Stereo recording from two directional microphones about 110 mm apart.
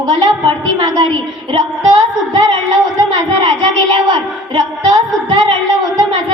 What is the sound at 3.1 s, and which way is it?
Music, 50° right (ahead or behind).